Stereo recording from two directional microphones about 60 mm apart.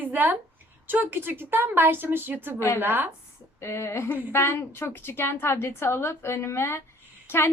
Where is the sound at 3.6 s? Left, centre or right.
Left.